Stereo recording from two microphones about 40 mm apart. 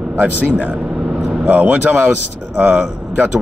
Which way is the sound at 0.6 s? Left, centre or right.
Right.